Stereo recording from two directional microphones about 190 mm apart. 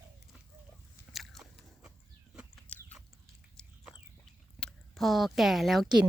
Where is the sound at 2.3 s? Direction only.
5° left (ahead or behind).